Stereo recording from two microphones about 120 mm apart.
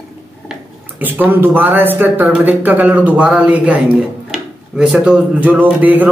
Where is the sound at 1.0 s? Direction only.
15° right (ahead or behind).